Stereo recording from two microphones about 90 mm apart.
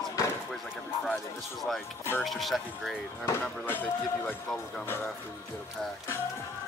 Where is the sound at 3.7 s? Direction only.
25° left (ahead or behind).